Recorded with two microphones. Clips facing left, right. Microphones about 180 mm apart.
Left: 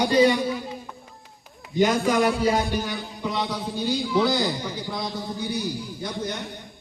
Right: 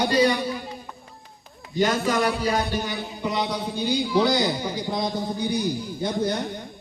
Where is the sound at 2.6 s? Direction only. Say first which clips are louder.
Even; centre (ahead or behind).